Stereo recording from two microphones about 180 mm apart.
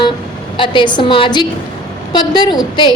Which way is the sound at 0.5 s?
25° left (ahead or behind).